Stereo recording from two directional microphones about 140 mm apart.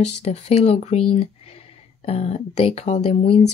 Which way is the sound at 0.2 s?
50° left (ahead or behind).